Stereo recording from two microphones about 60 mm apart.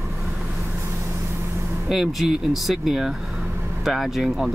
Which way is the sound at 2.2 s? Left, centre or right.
Centre.